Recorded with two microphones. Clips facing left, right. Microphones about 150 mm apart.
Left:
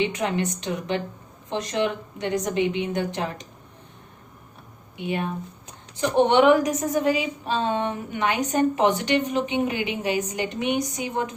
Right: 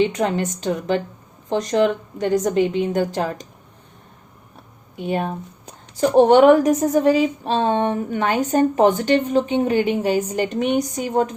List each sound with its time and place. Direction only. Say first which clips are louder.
0.0 s a woman's voice: right 5 dB; 35° right (ahead or behind)
4.9 s a woman's voice: right 4 dB; 40° right (ahead or behind)